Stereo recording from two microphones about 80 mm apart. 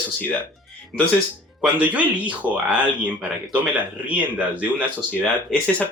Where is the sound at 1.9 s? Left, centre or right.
Centre.